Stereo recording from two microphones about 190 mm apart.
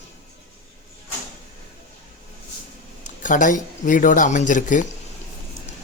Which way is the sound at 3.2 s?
45° left (ahead or behind).